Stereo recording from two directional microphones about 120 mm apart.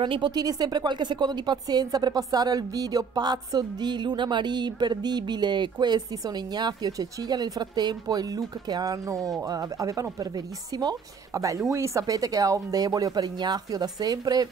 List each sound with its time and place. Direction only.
0.0 s a woman's voice: 40° right (ahead or behind)